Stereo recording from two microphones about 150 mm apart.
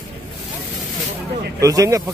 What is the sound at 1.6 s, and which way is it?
Speech, 20° right (ahead or behind).